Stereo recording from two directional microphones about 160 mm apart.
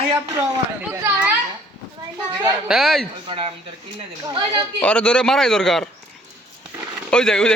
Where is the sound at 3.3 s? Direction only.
35° right (ahead or behind).